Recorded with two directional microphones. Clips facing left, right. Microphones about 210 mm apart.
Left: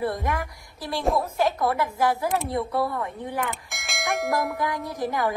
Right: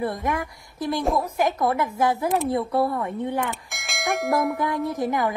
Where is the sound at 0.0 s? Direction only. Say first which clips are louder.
Right 1 dB; 20° right (ahead or behind).